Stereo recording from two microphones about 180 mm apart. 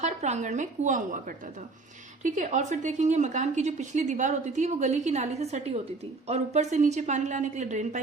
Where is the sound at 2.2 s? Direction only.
45° right (ahead or behind).